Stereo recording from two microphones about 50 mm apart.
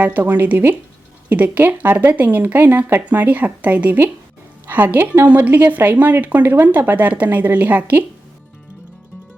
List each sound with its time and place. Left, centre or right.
0.0 s a woman's voice: right
4.6 s a woman's voice: right